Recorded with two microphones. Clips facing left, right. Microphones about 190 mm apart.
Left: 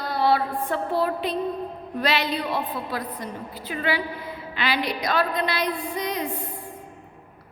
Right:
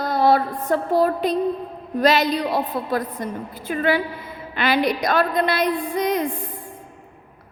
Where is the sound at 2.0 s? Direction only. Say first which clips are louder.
Right 7 dB; 40° right (ahead or behind).